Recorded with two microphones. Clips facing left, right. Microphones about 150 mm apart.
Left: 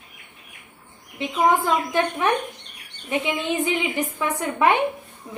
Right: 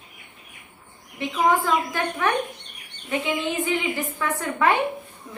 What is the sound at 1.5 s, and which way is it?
A woman's voice, 20° left (ahead or behind).